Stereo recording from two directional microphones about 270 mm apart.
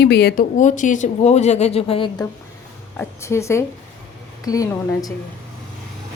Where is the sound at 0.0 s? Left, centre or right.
Left; by 5.1 s centre.